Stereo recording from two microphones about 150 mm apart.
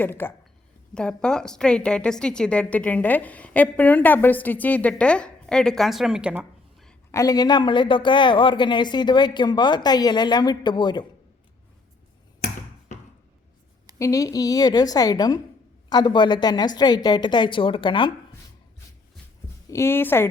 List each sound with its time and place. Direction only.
0.0 s a woman's voice: 15° left (ahead or behind); by 6.9 s 5° right (ahead or behind)
7.1 s a woman's voice: 20° left (ahead or behind)
14.0 s a woman's voice: 20° left (ahead or behind)
19.7 s a woman's voice: 15° left (ahead or behind)